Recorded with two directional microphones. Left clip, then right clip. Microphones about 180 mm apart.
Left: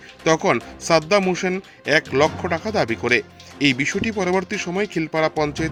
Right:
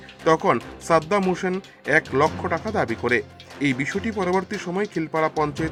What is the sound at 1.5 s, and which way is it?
Speech, 50° left (ahead or behind).